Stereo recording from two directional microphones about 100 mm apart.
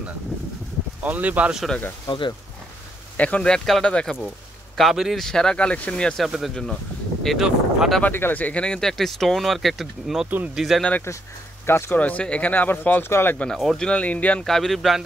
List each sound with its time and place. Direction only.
1.0 s speech: 15° right (ahead or behind)
2.0 s speech: 50° left (ahead or behind)
3.2 s speech: 15° left (ahead or behind)
4.7 s speech: centre (ahead or behind)
6.2 s speech: centre (ahead or behind)
7.2 s speech: 5° right (ahead or behind)
8.0 s speech: 20° left (ahead or behind); by 10.9 s centre (ahead or behind)
11.6 s speech: 20° left (ahead or behind)
13.5 s speech: 5° left (ahead or behind)
14.4 s speech: 5° left (ahead or behind)